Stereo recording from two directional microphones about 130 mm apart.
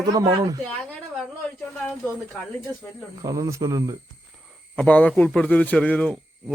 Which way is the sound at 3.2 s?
25° right (ahead or behind).